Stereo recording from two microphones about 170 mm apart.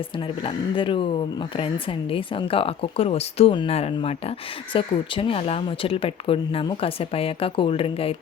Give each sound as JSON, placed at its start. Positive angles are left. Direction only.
{"t": 0.4, "sound": "speech", "side_deg": 30}